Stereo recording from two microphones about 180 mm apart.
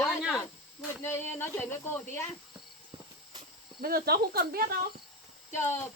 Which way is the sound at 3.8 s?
60° right (ahead or behind).